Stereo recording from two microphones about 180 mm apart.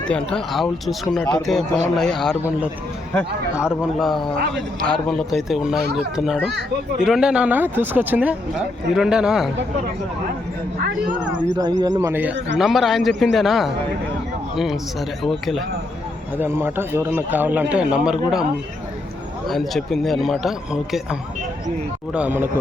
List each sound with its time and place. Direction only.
0.1 s speech: 5° left (ahead or behind)
3.8 s speech: centre (ahead or behind)
11.2 s a man's voice: 5° right (ahead or behind)
11.5 s speech: 25° right (ahead or behind)
11.9 s a man's voice: 10° right (ahead or behind)
16.4 s a man's voice: 10° right (ahead or behind)
19.5 s a man's voice: centre (ahead or behind)